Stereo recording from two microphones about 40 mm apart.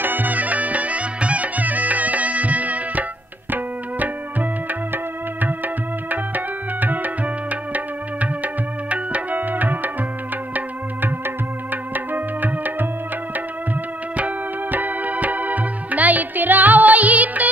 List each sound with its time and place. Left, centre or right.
0.0 s music: right
6.0 s tabla: right
7.7 s music: right
9.4 s tabla: right
11.2 s music: right
14.1 s music: right